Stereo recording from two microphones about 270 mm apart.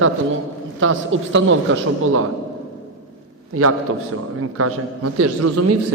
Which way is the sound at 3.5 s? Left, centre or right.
Right.